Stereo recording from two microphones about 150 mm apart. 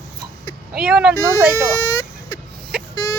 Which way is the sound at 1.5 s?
20° left (ahead or behind).